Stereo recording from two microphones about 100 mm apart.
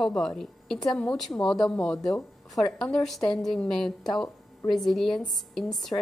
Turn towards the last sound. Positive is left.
turn(degrees=45)  # may be behind; listen again after turning